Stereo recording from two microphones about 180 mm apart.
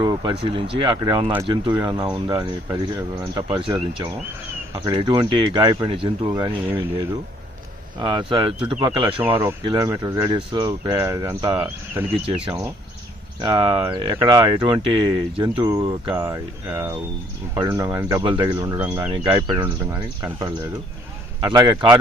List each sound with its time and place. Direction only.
0.0 s speech: 25° right (ahead or behind)
8.0 s speech: 30° right (ahead or behind)
9.2 s speech: 10° right (ahead or behind)
11.5 s speech: 10° right (ahead or behind)
12.2 s speech: 35° right (ahead or behind)
16.1 s speech: 15° right (ahead or behind)
21.5 s speech: 25° right (ahead or behind)